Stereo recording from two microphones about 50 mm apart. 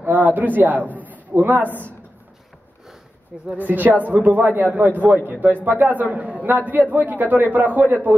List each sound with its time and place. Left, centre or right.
0.1 s a man's voice: right
0.9 s a sound: right
1.7 s speech: left
3.5 s a man's voice: right